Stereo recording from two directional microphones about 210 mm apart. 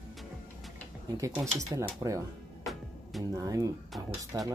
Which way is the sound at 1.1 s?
15° right (ahead or behind).